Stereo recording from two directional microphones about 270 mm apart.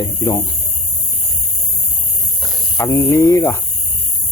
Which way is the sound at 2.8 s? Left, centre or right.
Centre.